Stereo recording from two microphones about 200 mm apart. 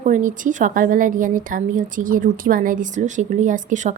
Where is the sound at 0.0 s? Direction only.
40° right (ahead or behind).